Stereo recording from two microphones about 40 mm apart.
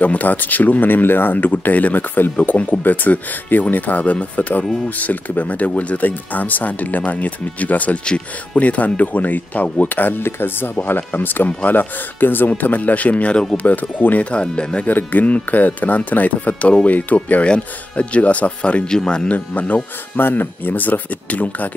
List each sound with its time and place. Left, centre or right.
0.0 s speech: left
2.3 s speech: left
10.2 s speech: left
14.3 s speech: left
14.9 s speech: left
17.4 s speech: left
18.9 s speech: centre
19.2 s speech: left
20.2 s speech: left